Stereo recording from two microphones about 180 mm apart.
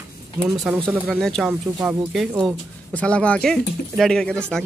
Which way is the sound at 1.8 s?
Centre (ahead or behind).